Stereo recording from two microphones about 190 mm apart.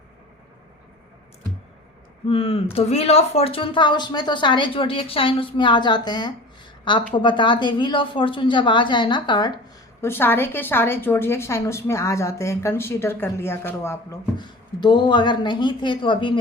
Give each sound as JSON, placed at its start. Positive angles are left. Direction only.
{"t": 2.2, "sound": "speech", "side_deg": 30}
{"t": 10.0, "sound": "a woman's voice", "side_deg": 10}